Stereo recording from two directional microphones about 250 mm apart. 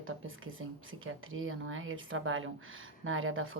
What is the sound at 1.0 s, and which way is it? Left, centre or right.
A woman's voice, right.